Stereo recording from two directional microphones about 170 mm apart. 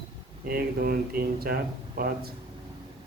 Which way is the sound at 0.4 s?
65° right (ahead or behind).